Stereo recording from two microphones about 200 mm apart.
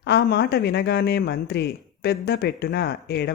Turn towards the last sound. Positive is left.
turn(degrees=55)  # may be behind; listen again after turning